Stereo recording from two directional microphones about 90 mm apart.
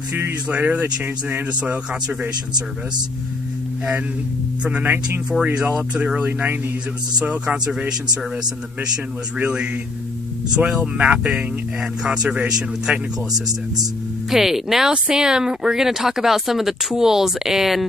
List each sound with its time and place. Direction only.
0.1 s speech: 20° right (ahead or behind)
4.6 s speech: 15° right (ahead or behind)
9.4 s speech: 10° right (ahead or behind)
14.3 s speech: 5° right (ahead or behind)